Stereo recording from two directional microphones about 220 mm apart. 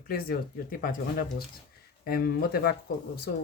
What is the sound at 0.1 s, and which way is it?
Speech, 40° left (ahead or behind).